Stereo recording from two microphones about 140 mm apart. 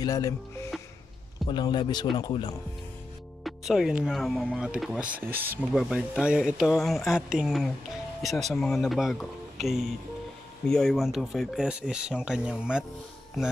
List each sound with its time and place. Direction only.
0.0 s speech: 25° left (ahead or behind)
3.4 s speech: centre (ahead or behind)